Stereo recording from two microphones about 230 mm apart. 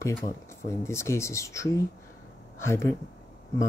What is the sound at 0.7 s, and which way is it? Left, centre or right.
Speech, centre.